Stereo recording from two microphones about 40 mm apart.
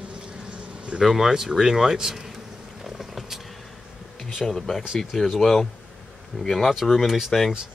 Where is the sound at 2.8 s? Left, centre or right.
Centre.